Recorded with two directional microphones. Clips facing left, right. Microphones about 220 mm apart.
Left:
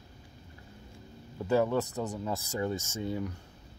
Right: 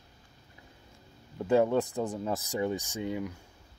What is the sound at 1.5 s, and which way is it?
Speech, 20° right (ahead or behind).